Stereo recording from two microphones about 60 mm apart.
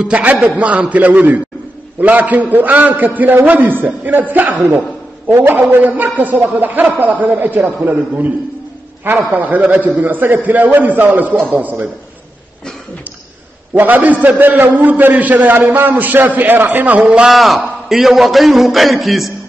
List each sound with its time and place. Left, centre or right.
0.0 s a man's voice: right
13.7 s a man's voice: right
17.3 s a man's voice: centre